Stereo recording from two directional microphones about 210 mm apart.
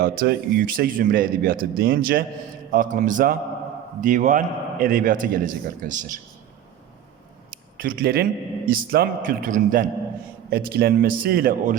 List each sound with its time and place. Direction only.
0.2 s a man's voice: 45° right (ahead or behind)
7.8 s speech: 45° right (ahead or behind)